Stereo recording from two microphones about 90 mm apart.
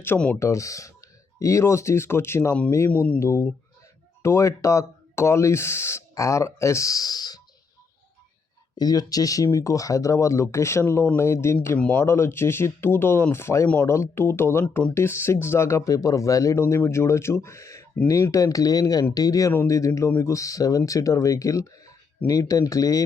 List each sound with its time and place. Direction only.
0.3 s speech: 35° left (ahead or behind)
2.9 s speech: 15° left (ahead or behind)
3.2 s speech: 25° left (ahead or behind); by 7.4 s 50° left (ahead or behind)
8.8 s speech: 45° left (ahead or behind); by 11.8 s 30° left (ahead or behind)
11.8 s speech: 15° left (ahead or behind)
12.0 s speech: 30° left (ahead or behind)